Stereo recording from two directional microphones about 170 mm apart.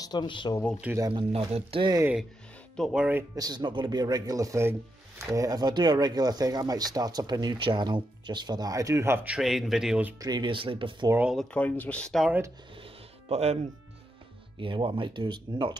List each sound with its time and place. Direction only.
0.0 s speech: 25° left (ahead or behind)
0.9 s speech: 20° right (ahead or behind)
1.3 s speech: 35° right (ahead or behind)
2.0 s speech: 10° right (ahead or behind)
3.3 s speech: 25° right (ahead or behind); by 10.1 s 5° right (ahead or behind)
10.1 s speech: 25° right (ahead or behind)
11.1 s speech: 10° right (ahead or behind)
11.3 s speech: 10° left (ahead or behind)
12.8 s music: 35° right (ahead or behind)
14.6 s speech: 30° right (ahead or behind)